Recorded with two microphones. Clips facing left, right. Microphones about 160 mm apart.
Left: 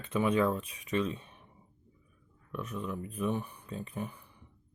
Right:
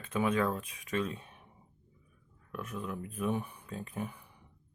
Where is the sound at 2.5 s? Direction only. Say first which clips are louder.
Left 2 dB; 5° right (ahead or behind).